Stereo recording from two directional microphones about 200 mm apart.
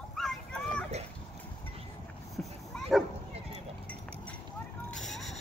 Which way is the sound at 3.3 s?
30° right (ahead or behind).